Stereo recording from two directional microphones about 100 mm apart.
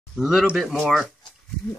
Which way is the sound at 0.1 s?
5° right (ahead or behind).